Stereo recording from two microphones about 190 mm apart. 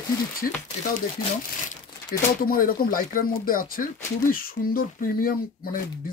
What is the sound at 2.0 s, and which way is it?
Speech, 50° left (ahead or behind).